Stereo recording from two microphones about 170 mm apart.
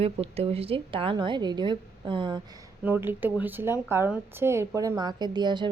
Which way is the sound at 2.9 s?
10° right (ahead or behind).